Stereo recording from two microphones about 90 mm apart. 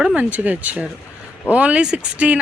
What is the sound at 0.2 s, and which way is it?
Speech, 20° right (ahead or behind).